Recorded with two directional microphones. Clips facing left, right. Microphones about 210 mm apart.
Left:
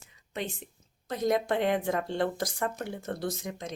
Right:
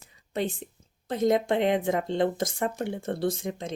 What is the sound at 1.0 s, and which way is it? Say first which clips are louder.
A woman's voice: right 4 dB; 25° right (ahead or behind).